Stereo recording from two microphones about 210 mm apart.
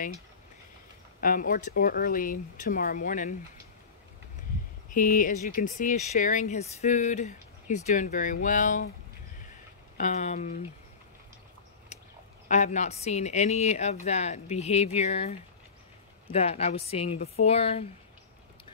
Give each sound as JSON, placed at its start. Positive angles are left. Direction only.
{"t": 1.2, "sound": "speech", "side_deg": 40}
{"t": 4.9, "sound": "speech", "side_deg": 40}
{"t": 9.9, "sound": "speech", "side_deg": 35}
{"t": 12.4, "sound": "speech", "side_deg": 35}